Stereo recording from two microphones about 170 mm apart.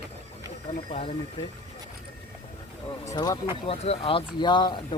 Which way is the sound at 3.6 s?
35° left (ahead or behind).